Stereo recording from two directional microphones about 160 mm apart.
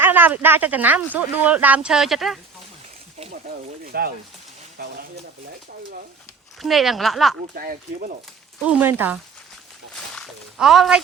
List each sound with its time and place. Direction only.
0.0 s speech: 10° right (ahead or behind)
3.9 s speech: 70° right (ahead or behind)
6.6 s speech: centre (ahead or behind)
7.5 s speech: 65° right (ahead or behind)
8.6 s speech: 10° right (ahead or behind)
9.9 s a sound: centre (ahead or behind)